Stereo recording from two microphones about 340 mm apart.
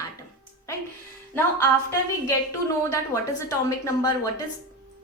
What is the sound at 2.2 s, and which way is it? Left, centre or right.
A woman's voice, centre.